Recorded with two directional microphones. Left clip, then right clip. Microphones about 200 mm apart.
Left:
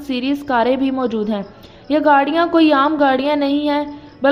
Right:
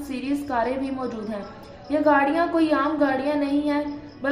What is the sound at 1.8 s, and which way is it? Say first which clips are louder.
A woman's voice: left 6 dB; 40° left (ahead or behind).